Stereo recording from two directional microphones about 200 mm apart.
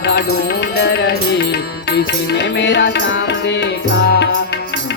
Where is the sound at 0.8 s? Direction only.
55° left (ahead or behind).